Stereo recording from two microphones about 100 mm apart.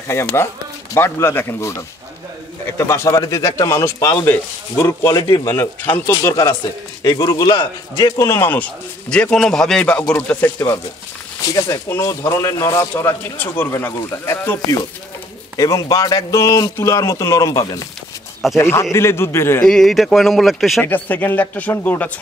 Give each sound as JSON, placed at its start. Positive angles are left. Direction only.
{"t": 0.1, "sound": "speech", "side_deg": 25}
{"t": 7.0, "sound": "a man's voice", "side_deg": 40}
{"t": 11.4, "sound": "a man's voice", "side_deg": 35}
{"t": 12.9, "sound": "speech", "side_deg": 15}
{"t": 15.5, "sound": "a man's voice", "side_deg": 35}
{"t": 19.6, "sound": "speech", "side_deg": 5}
{"t": 20.8, "sound": "speech", "side_deg": 20}